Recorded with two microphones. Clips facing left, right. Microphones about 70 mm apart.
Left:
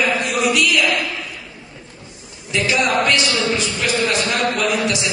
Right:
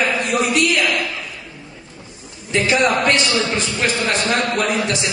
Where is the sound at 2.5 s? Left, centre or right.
Right.